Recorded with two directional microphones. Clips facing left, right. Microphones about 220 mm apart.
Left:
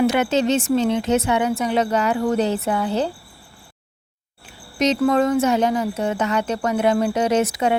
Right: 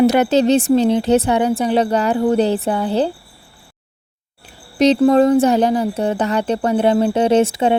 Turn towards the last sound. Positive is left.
turn(degrees=-30)  # may be behind; listen again after turning